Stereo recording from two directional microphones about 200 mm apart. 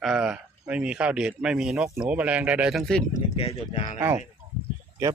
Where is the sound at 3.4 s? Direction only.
35° left (ahead or behind).